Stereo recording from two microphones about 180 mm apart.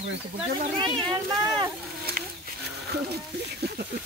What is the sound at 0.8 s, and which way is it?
Speech, 20° right (ahead or behind).